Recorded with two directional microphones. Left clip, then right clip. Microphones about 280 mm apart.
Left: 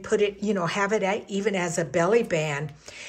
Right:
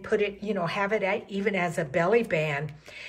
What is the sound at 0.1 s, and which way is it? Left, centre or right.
A woman's voice, centre.